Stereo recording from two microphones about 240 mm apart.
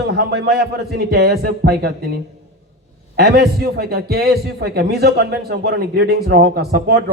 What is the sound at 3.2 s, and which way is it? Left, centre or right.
A man's voice, right.